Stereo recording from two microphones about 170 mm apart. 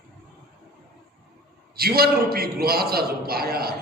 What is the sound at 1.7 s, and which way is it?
A man's voice, 65° right (ahead or behind).